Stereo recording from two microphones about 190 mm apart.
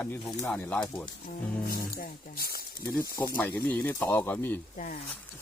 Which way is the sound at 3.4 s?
10° left (ahead or behind).